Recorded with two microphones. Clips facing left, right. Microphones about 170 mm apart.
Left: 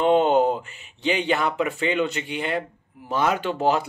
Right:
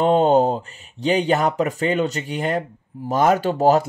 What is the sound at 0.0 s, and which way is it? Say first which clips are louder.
Speech: right 2 dB; 35° right (ahead or behind).